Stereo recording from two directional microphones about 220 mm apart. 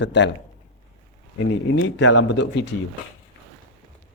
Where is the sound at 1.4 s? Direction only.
60° left (ahead or behind).